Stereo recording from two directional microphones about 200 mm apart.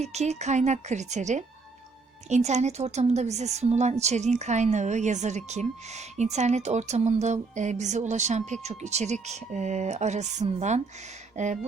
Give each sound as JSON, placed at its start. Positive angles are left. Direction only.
{"t": 0.0, "sound": "speech", "side_deg": -35}